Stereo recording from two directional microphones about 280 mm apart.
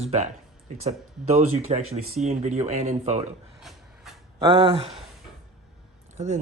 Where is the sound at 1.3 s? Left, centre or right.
Right.